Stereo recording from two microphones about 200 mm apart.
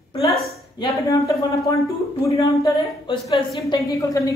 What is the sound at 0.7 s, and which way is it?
A woman's voice, 15° left (ahead or behind).